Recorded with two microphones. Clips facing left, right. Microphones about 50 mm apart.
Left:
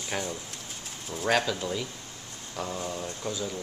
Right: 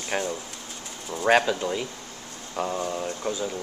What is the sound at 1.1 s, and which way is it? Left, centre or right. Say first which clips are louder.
Speech: right 6 dB; right.